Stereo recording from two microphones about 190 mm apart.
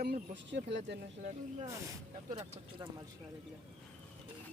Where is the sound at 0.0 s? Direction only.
60° right (ahead or behind).